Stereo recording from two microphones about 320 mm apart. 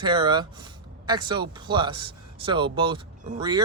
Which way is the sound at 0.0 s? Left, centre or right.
Centre.